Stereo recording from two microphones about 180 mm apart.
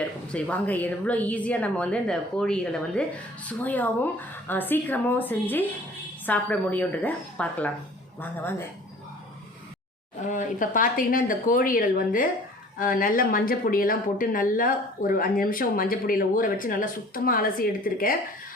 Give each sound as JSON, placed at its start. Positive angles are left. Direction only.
{"t": 0.0, "sound": "a woman's voice", "side_deg": 5}
{"t": 10.2, "sound": "speech", "side_deg": 45}